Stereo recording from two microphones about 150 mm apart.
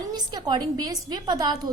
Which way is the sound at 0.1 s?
30° right (ahead or behind).